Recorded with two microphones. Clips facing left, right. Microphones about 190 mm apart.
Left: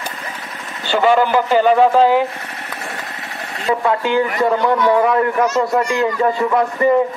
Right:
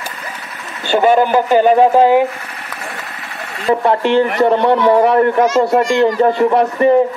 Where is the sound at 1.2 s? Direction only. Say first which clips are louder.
Right 3 dB; 15° right (ahead or behind).